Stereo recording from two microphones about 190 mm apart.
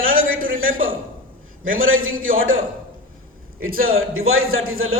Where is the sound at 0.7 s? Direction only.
90° right.